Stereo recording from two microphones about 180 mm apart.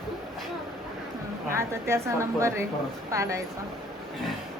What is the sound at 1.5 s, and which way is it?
A woman's voice, 15° right (ahead or behind).